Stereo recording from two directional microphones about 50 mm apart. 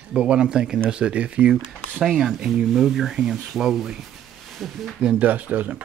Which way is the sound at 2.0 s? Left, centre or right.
Centre.